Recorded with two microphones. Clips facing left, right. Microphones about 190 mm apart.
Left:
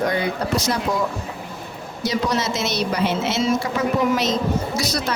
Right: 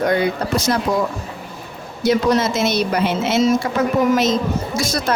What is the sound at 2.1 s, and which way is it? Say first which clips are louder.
A woman's voice: right 7 dB; 50° right (ahead or behind).